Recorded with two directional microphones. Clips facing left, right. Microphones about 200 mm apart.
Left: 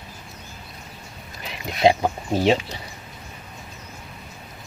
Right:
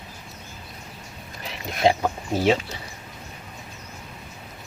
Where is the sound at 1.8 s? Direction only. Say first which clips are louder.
Left 3 dB; 20° left (ahead or behind).